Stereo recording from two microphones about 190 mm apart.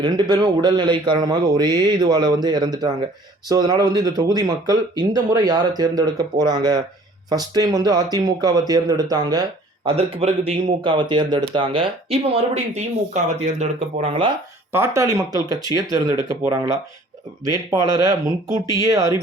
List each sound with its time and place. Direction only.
0.0 s speech: 25° right (ahead or behind)
9.8 s speech: 30° right (ahead or behind)
14.7 s speech: 15° right (ahead or behind)